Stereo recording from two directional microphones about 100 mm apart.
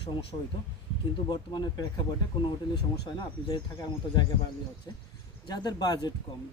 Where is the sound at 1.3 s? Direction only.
45° left (ahead or behind).